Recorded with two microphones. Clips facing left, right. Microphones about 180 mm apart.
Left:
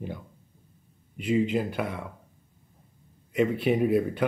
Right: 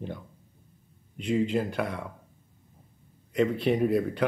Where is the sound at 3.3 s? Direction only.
5° left (ahead or behind).